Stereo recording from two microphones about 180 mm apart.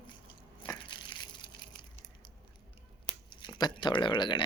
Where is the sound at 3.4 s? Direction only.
25° left (ahead or behind).